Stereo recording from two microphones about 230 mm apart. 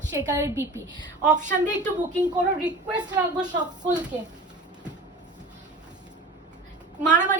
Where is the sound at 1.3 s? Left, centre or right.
Right.